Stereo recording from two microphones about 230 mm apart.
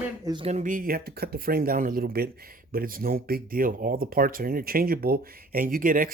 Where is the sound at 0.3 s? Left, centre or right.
Right.